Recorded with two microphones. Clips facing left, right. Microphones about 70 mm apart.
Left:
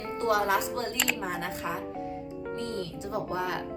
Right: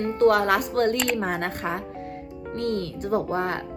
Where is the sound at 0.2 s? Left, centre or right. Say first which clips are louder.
Right 6 dB; right.